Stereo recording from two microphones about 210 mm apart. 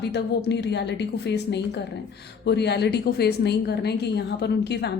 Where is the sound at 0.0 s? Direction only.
55° left (ahead or behind).